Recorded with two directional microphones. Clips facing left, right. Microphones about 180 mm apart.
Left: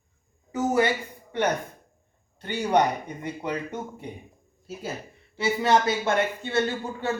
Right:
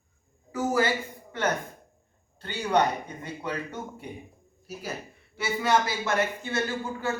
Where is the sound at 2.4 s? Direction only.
20° left (ahead or behind).